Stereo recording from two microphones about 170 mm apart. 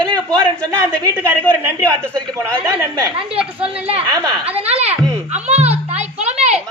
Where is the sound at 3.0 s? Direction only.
30° right (ahead or behind).